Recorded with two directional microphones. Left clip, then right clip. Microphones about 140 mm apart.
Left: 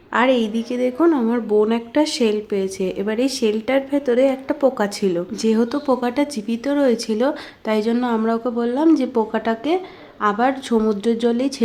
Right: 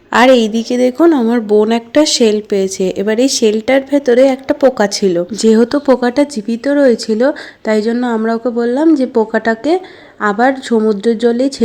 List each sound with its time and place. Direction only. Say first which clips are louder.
0.1 s a woman's voice: right 9 dB; 40° right (ahead or behind)
5.4 s speech: right 10 dB; 45° right (ahead or behind)